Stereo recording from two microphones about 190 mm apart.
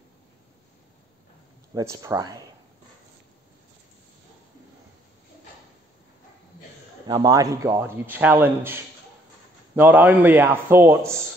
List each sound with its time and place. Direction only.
1.7 s speech: 15° right (ahead or behind)
7.1 s a man's voice: 20° right (ahead or behind)
9.8 s a man's voice: 10° right (ahead or behind)